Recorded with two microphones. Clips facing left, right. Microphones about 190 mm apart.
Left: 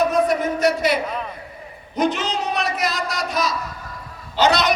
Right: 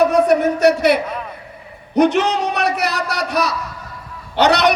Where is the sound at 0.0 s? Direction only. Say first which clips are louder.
Right 5 dB; 65° right (ahead or behind).